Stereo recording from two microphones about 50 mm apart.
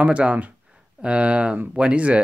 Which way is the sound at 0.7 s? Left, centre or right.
Centre.